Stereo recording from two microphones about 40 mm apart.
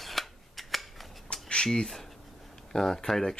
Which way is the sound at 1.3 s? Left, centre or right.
Left.